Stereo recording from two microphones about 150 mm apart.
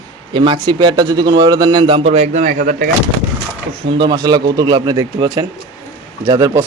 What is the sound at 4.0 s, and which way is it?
A man's voice, 30° right (ahead or behind).